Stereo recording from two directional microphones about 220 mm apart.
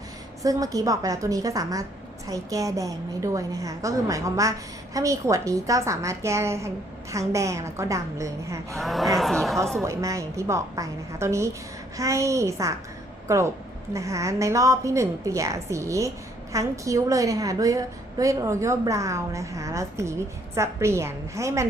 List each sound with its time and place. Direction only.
0.4 s a woman's voice: 15° right (ahead or behind)
8.7 s speech: centre (ahead or behind)
9.8 s a woman's voice: 15° right (ahead or behind)